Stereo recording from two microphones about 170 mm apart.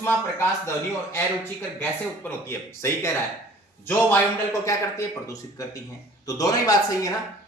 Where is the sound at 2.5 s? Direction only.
15° left (ahead or behind).